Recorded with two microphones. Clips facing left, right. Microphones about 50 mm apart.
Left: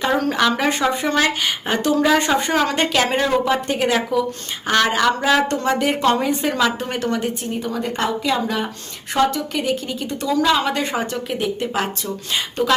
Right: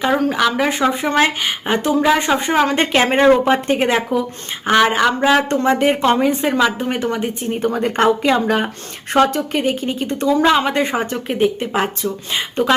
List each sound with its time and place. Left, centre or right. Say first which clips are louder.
0.0 s speech: right 2 dB; centre
1.1 s a woman's voice: right 3 dB; right
7.6 s a woman's voice: right 8 dB; right